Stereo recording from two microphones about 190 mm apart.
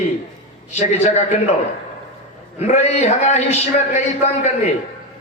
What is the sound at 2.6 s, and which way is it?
A man's voice, 35° left (ahead or behind).